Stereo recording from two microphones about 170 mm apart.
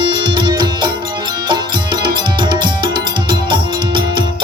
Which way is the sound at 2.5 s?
30° right (ahead or behind).